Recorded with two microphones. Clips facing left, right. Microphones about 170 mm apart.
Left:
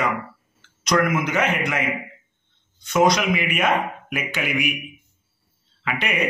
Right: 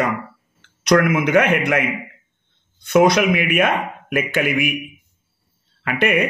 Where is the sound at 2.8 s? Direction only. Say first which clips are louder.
Right 4 dB; 60° right (ahead or behind).